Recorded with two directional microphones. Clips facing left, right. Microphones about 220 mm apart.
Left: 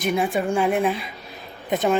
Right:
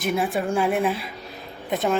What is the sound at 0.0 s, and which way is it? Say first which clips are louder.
A woman's voice: left 2 dB; centre (ahead or behind).